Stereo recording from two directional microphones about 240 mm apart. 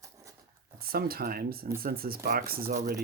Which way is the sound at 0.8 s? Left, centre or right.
Right.